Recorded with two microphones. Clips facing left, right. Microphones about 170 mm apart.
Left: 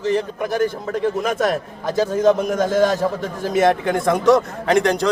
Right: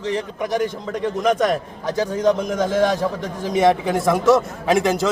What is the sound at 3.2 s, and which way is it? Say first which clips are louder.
A man's voice: right 1 dB; 5° left (ahead or behind).